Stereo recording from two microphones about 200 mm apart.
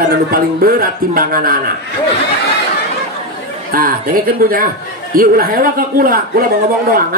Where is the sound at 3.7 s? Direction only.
45° right (ahead or behind).